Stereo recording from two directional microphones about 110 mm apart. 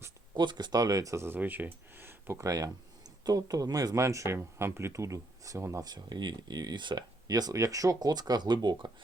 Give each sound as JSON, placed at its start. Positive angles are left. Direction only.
{"t": 0.3, "sound": "speech", "side_deg": -40}